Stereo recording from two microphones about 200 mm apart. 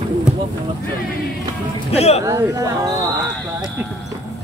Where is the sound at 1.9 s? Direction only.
30° left (ahead or behind).